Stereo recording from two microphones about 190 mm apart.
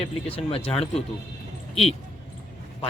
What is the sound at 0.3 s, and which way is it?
Speech, 30° left (ahead or behind).